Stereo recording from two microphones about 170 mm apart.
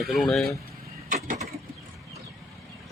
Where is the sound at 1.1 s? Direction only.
55° right (ahead or behind).